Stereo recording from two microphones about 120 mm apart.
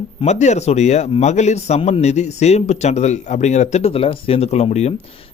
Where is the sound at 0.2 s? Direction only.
70° left (ahead or behind).